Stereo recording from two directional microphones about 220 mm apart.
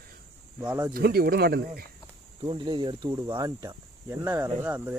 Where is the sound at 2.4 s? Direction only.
20° right (ahead or behind).